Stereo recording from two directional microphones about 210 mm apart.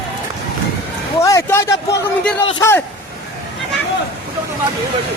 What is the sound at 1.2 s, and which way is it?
A man's voice, 15° left (ahead or behind).